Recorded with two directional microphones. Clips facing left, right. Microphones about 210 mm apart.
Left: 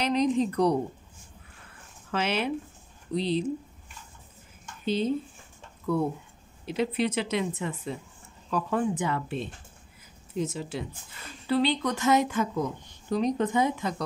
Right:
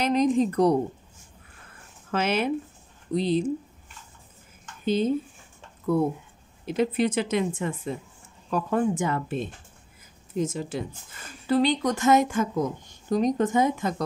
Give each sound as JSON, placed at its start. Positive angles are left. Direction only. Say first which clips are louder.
{"t": 0.0, "sound": "speech", "louder": "right 3 dB", "side_deg": -50}
{"t": 2.0, "sound": "speech", "louder": "right 3 dB", "side_deg": -45}
{"t": 4.8, "sound": "speech", "louder": "right 3 dB", "side_deg": -50}